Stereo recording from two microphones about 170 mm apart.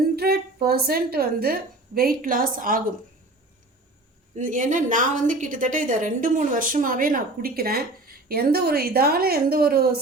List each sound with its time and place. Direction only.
0.2 s a woman's voice: 65° right (ahead or behind)
4.4 s a woman's voice: 50° right (ahead or behind)